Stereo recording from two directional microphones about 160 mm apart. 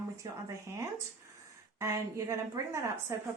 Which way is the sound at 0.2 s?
20° right (ahead or behind).